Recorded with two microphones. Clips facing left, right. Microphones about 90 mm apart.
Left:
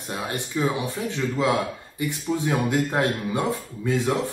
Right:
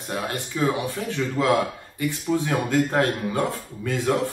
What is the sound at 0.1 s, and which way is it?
Speech, 15° left (ahead or behind).